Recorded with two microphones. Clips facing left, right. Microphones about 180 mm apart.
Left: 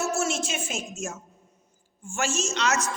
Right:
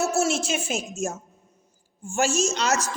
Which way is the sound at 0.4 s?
40° right (ahead or behind).